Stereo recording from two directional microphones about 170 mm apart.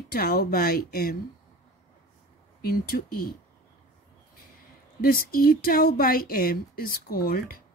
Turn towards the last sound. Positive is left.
turn(degrees=60)  # may be behind; listen again after turning